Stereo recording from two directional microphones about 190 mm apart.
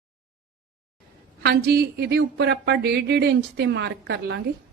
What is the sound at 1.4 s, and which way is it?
Speech, 55° right (ahead or behind).